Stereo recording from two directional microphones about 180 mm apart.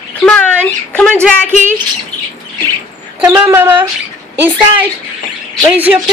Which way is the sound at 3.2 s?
10° right (ahead or behind).